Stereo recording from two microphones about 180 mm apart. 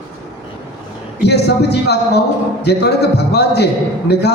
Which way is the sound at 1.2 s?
65° left (ahead or behind).